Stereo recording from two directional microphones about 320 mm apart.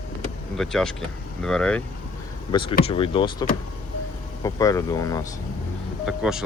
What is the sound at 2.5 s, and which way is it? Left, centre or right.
Speech, centre.